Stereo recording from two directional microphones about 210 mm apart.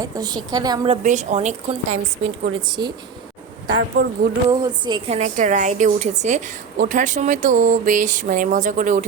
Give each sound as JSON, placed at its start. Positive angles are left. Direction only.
{"t": 0.0, "sound": "a woman's voice", "side_deg": -20}
{"t": 1.0, "sound": "a woman's voice", "side_deg": -35}
{"t": 2.6, "sound": "a woman's voice", "side_deg": -20}
{"t": 3.8, "sound": "speech", "side_deg": -55}
{"t": 4.4, "sound": "a woman's voice", "side_deg": -20}